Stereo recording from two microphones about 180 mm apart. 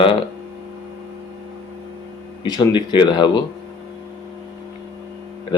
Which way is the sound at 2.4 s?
25° left (ahead or behind).